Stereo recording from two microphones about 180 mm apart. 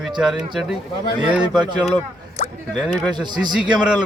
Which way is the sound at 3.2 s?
25° right (ahead or behind).